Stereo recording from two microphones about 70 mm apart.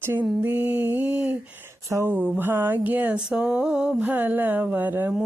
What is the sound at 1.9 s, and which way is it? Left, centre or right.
Speech, right.